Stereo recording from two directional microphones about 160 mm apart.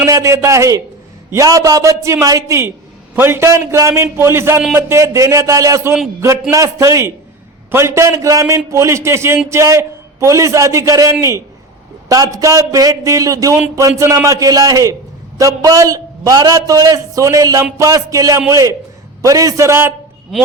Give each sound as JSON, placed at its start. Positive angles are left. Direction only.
{"t": 0.0, "sound": "a man's voice", "side_deg": -20}